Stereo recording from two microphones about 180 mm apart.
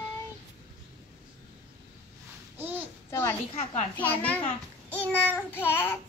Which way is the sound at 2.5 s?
10° right (ahead or behind).